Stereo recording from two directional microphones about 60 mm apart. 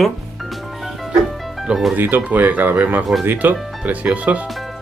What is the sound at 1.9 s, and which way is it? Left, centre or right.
Speech, right.